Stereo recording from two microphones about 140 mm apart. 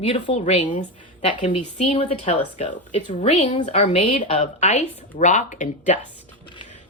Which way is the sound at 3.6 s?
60° left (ahead or behind).